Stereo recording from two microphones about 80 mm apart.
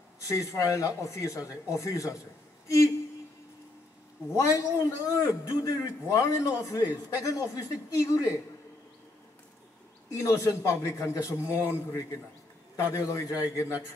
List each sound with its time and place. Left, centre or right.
0.2 s a man's voice: left
4.3 s a man's voice: left
10.1 s a man's voice: left